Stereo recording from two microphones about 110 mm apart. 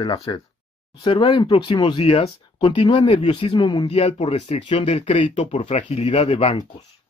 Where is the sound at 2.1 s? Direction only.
70° left (ahead or behind).